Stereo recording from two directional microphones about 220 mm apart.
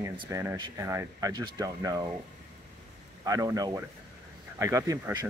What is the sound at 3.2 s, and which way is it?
Speech, 15° right (ahead or behind).